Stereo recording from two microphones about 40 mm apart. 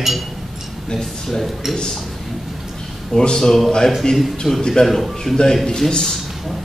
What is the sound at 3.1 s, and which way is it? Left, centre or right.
A man's voice, centre.